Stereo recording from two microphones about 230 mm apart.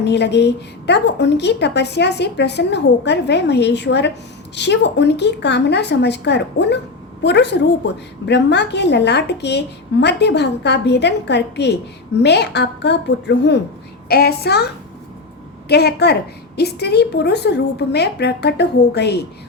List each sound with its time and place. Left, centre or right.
0.0 s a woman's voice: left
15.7 s a woman's voice: left